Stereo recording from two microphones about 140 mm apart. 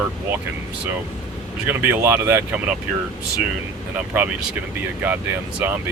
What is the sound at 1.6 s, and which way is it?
Speech, 15° right (ahead or behind).